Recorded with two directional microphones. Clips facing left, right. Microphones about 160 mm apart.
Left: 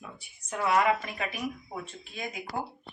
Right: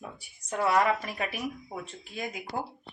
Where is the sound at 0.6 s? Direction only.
35° right (ahead or behind).